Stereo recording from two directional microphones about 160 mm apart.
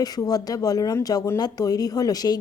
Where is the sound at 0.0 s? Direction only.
25° left (ahead or behind).